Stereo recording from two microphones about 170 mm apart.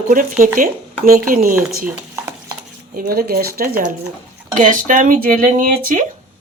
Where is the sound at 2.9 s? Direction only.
60° right (ahead or behind).